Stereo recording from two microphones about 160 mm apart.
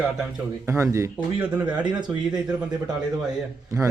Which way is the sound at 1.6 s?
30° right (ahead or behind).